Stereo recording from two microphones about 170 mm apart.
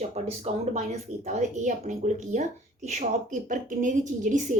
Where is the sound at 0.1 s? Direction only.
40° right (ahead or behind).